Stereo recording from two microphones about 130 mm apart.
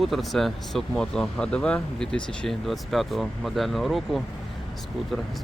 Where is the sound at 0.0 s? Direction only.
Centre (ahead or behind).